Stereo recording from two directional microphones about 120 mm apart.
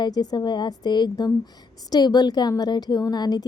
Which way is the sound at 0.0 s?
35° left (ahead or behind).